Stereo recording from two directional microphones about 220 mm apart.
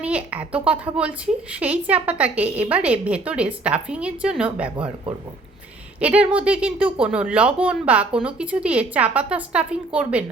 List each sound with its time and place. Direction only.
0.0 s a woman's voice: 5° right (ahead or behind)
6.0 s speech: 5° right (ahead or behind)